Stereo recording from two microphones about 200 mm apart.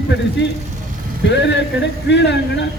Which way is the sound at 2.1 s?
60° left (ahead or behind).